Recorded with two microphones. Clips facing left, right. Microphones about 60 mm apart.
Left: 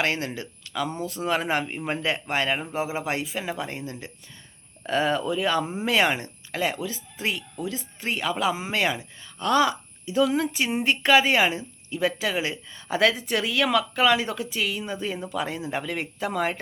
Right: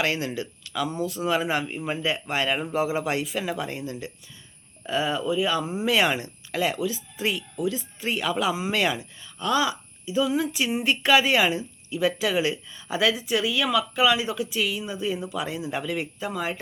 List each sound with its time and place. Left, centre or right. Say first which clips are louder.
0.0 s speech: even; left
2.2 s speech: even; left
4.9 s speech: left 1 dB; left
9.4 s speech: left 2 dB; left